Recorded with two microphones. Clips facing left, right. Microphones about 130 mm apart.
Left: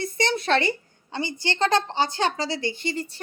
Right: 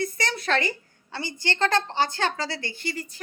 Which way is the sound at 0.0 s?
25° left (ahead or behind).